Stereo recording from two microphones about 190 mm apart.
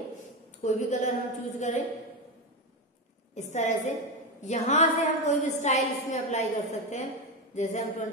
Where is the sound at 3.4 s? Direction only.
40° left (ahead or behind).